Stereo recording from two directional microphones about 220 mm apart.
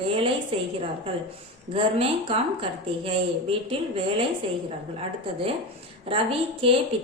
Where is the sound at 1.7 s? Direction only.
25° right (ahead or behind).